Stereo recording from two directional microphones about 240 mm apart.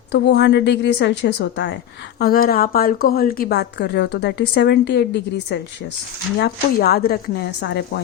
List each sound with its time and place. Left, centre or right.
0.1 s a woman's voice: left